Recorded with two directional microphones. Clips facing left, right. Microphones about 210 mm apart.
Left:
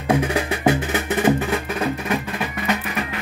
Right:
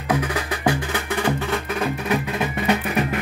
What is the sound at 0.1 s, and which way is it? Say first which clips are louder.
Music: left 4 dB; 25° left (ahead or behind).